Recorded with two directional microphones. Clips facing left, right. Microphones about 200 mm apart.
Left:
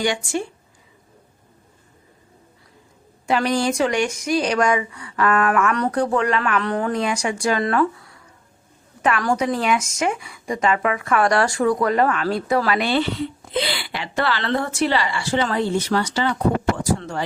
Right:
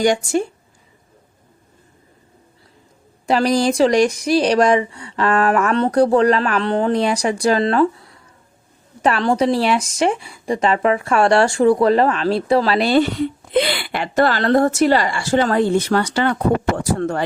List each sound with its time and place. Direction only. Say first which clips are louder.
0.0 s speech: right 6 dB; 40° right (ahead or behind)
3.2 s speech: right 4 dB; 35° right (ahead or behind); by 17.2 s 55° right (ahead or behind)